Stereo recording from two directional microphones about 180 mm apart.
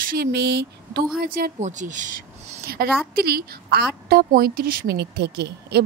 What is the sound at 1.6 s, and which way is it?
Speech, 45° right (ahead or behind).